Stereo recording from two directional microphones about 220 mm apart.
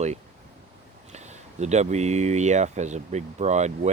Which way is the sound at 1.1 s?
30° right (ahead or behind).